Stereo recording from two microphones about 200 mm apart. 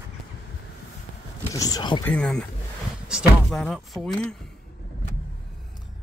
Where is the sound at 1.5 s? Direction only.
15° left (ahead or behind).